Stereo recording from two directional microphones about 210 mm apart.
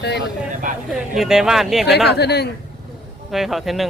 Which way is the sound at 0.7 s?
40° right (ahead or behind).